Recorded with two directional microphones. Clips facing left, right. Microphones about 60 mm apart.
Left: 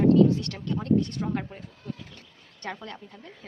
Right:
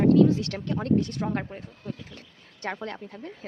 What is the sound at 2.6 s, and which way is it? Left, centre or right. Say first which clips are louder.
Speech: right 3 dB; right.